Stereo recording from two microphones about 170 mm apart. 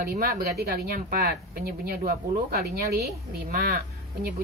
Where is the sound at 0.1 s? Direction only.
60° right (ahead or behind).